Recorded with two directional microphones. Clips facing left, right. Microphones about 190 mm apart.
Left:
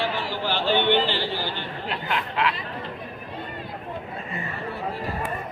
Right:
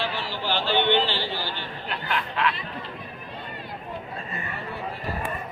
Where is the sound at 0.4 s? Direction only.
15° left (ahead or behind).